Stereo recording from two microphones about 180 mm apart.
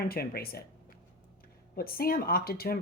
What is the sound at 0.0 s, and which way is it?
Speech, 60° left (ahead or behind).